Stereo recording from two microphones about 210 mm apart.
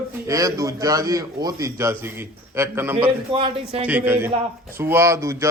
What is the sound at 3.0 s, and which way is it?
Speech, 25° right (ahead or behind).